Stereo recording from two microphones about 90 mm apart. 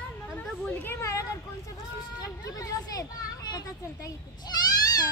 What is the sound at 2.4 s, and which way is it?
A child's voice, 45° left (ahead or behind).